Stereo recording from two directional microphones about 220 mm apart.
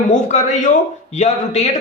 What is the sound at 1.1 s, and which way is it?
Speech, 30° left (ahead or behind).